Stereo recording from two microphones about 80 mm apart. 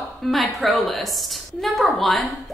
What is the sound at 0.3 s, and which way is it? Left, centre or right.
A woman's voice, centre.